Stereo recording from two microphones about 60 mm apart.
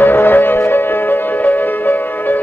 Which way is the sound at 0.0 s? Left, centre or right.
Left.